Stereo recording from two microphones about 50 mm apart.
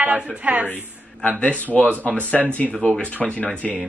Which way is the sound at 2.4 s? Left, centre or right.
Centre.